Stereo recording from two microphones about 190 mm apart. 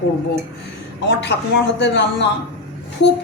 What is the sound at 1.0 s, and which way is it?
A woman's voice, 65° left (ahead or behind).